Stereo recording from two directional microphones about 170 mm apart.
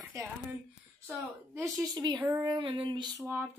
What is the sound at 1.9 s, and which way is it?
Female singing, 25° right (ahead or behind).